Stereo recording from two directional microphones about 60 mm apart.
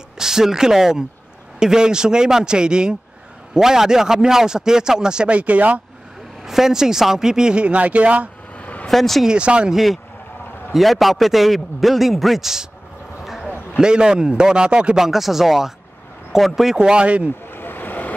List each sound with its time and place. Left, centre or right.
0.2 s a man's voice: centre; by 5.8 s right
6.4 s a man's voice: centre; by 8.3 s right
8.5 s vehicle: left
8.8 s speech: centre
9.2 s a man's voice: centre
10.7 s a man's voice: centre
13.2 s basketball bounce: centre
13.7 s a man's voice: centre
15.0 s a man's voice: centre
16.7 s a man's voice: centre
17.5 s vehicle: left